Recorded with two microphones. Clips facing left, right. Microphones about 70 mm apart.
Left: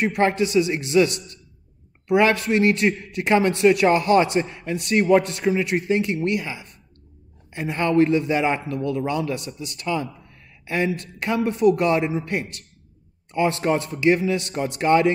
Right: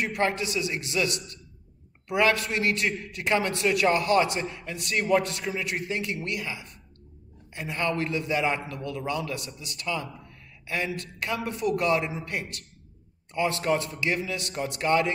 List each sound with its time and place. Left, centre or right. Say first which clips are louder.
0.0 s a man's voice: left 7 dB; left